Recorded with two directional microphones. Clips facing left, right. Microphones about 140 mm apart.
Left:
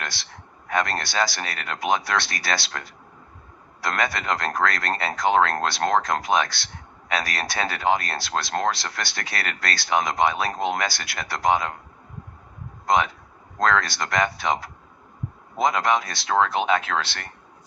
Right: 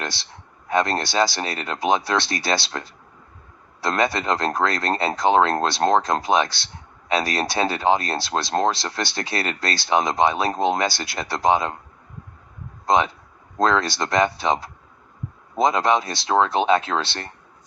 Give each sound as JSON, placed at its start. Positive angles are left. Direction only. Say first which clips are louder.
{"t": 0.0, "sound": "a man's voice", "louder": "right 4 dB", "side_deg": -30}
{"t": 12.8, "sound": "a sound", "louder": "right 2 dB", "side_deg": -30}
{"t": 13.6, "sound": "speech", "louder": "right 2 dB", "side_deg": -30}